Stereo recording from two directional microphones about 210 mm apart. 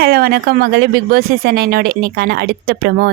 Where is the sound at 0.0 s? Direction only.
45° right (ahead or behind).